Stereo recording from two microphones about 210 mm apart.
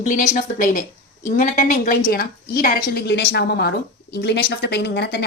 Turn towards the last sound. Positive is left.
turn(degrees=50)  # may be behind; listen again after turning